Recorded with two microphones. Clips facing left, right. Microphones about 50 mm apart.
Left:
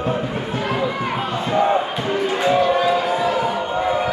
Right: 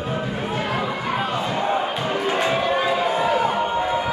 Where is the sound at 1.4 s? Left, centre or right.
Centre.